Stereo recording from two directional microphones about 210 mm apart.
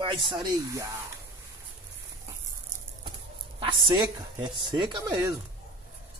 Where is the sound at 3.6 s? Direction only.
25° right (ahead or behind).